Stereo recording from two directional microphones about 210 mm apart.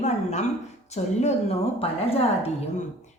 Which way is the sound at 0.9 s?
30° left (ahead or behind).